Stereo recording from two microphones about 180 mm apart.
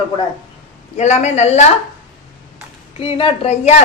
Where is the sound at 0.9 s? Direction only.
40° left (ahead or behind).